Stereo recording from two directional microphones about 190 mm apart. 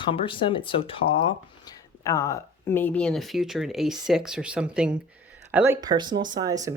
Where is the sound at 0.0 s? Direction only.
25° left (ahead or behind).